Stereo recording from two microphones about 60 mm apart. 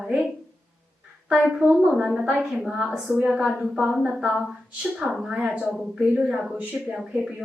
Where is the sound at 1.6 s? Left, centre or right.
Centre.